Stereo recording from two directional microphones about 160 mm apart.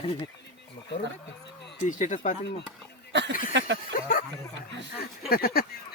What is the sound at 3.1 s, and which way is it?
Speech, 90° right.